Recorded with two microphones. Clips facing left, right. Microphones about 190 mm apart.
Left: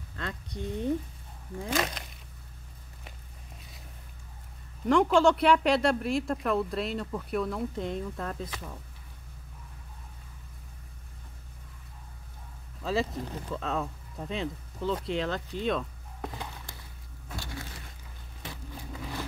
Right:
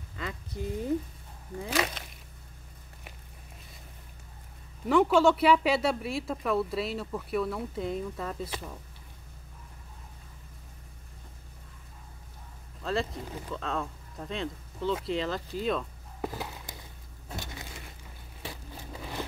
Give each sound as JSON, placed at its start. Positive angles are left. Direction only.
{"t": 0.1, "sound": "a woman's voice", "side_deg": -5}
{"t": 4.8, "sound": "a woman's voice", "side_deg": -5}
{"t": 12.8, "sound": "speech", "side_deg": 0}
{"t": 17.4, "sound": "a sound", "side_deg": -20}